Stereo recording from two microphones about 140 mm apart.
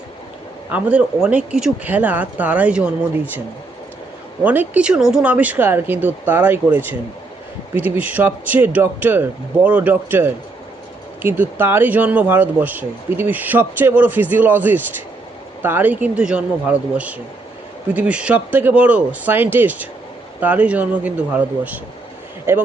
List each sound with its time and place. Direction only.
0.7 s speech: 10° right (ahead or behind)
4.4 s speech: 10° right (ahead or behind)